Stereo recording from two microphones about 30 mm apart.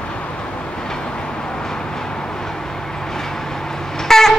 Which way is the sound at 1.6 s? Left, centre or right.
Centre.